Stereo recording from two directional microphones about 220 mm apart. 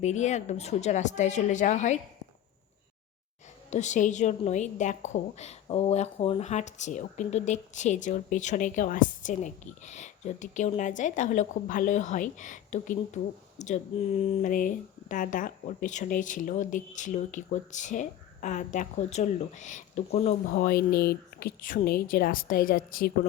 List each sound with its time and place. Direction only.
0.0 s a woman's voice: 30° left (ahead or behind)
3.7 s a woman's voice: 30° left (ahead or behind)
20.5 s a woman's voice: 40° left (ahead or behind)